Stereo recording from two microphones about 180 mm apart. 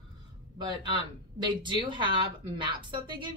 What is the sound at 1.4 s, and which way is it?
Speech, 25° right (ahead or behind).